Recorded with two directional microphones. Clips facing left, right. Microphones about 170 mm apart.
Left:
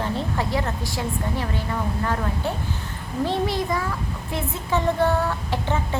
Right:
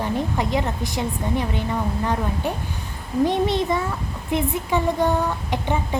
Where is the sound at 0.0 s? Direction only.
15° right (ahead or behind).